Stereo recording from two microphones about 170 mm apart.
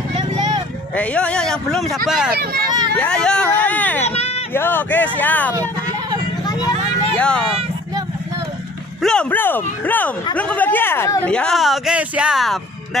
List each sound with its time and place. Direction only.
0.9 s speech: 5° left (ahead or behind)
2.3 s speech: 60° right (ahead or behind)
3.0 s a sound: 5° left (ahead or behind)
4.6 s speech: 10° left (ahead or behind)
7.2 s speech: 5° left (ahead or behind)
9.0 s speech: 5° left (ahead or behind)